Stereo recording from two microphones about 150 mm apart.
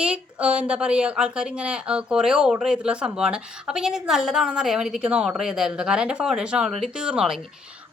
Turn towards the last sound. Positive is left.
turn(degrees=-5)  # may be behind; listen again after turning